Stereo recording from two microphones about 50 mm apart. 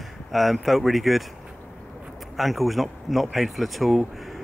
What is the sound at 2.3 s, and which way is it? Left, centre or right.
Speech, centre.